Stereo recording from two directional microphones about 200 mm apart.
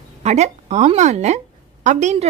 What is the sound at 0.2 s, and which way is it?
A woman's voice, 35° right (ahead or behind).